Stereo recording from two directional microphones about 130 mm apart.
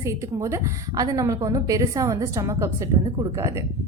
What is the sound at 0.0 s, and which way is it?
A woman's voice, 25° right (ahead or behind).